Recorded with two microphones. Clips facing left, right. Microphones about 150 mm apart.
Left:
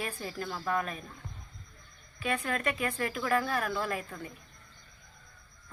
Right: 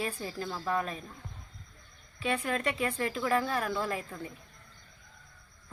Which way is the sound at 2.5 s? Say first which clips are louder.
Right 1 dB; 25° right (ahead or behind).